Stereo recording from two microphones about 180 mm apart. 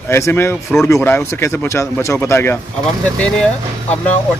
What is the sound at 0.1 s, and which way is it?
A child's voice, 15° left (ahead or behind).